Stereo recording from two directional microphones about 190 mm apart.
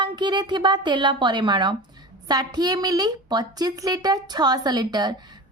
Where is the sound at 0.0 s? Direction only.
25° right (ahead or behind).